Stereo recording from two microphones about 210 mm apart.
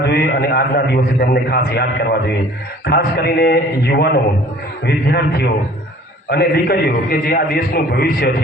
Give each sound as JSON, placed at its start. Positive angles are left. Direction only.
{"t": 0.0, "sound": "a man's voice", "side_deg": 50}